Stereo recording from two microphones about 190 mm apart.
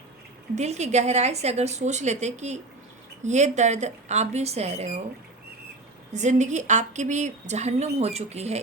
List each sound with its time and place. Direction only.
0.5 s a woman's voice: 35° right (ahead or behind)
6.1 s a woman's voice: 40° right (ahead or behind)